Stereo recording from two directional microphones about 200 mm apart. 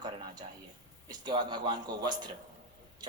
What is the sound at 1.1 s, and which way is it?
Speech, 20° right (ahead or behind).